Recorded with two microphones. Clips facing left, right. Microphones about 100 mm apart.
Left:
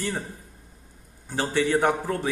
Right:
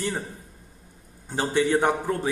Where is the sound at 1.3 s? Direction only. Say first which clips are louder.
Right 1 dB; 20° right (ahead or behind).